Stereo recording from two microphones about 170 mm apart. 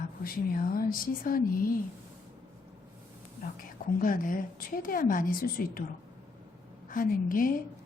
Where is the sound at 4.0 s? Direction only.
55° left (ahead or behind).